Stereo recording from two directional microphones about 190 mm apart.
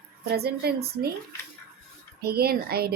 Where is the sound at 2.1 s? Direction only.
55° right (ahead or behind).